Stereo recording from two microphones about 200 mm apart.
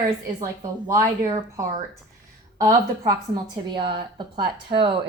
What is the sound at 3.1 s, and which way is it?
A woman's voice, 20° right (ahead or behind).